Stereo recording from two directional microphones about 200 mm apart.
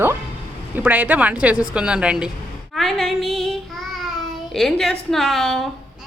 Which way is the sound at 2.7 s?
Centre (ahead or behind).